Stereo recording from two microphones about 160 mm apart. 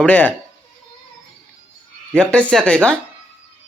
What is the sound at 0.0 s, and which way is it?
Speech, 10° left (ahead or behind).